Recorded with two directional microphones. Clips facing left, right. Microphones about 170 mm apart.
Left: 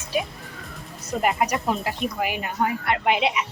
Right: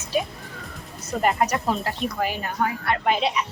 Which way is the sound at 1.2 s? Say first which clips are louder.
Right 1 dB; 10° left (ahead or behind).